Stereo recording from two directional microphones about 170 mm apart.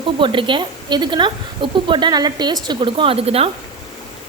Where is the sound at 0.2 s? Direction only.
30° right (ahead or behind).